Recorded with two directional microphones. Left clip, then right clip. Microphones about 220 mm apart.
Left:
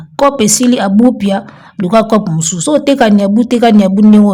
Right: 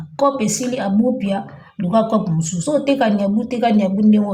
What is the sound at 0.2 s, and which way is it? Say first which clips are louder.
A woman's voice: left 8 dB; 40° left (ahead or behind).